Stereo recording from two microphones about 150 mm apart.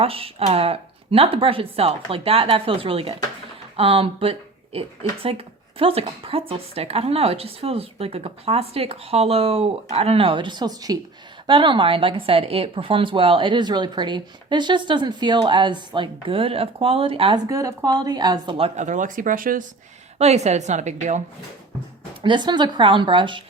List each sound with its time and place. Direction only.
0.0 s speech: 40° right (ahead or behind)
17.5 s a woman's voice: 20° right (ahead or behind)
18.8 s speech: 55° right (ahead or behind)
20.1 s a woman's voice: 45° right (ahead or behind)
22.2 s speech: 30° right (ahead or behind)